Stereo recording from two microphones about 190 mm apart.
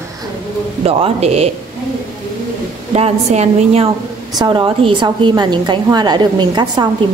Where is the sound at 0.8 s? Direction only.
30° right (ahead or behind).